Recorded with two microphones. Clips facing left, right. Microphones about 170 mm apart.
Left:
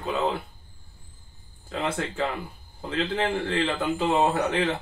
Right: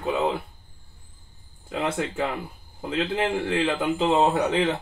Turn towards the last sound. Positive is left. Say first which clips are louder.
# right 2 dB
turn(degrees=-20)  # may be behind; listen again after turning